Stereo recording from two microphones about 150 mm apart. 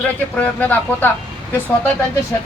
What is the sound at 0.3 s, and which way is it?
Speech, 10° left (ahead or behind).